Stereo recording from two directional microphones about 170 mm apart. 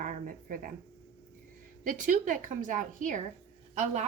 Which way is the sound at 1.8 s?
50° right (ahead or behind).